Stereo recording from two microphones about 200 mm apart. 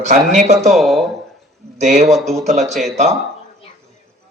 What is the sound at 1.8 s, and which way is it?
Speech, 35° right (ahead or behind).